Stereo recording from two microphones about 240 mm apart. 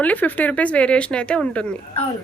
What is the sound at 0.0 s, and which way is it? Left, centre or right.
Speech, centre.